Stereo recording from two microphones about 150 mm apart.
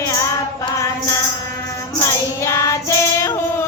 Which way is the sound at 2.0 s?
20° left (ahead or behind).